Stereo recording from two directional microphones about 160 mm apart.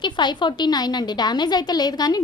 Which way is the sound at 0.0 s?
30° left (ahead or behind).